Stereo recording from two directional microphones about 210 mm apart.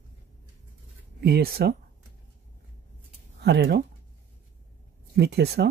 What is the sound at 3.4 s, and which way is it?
Speech, 50° right (ahead or behind).